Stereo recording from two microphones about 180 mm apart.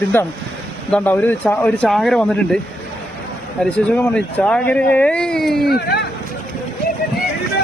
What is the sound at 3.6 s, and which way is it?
Speech, 10° left (ahead or behind).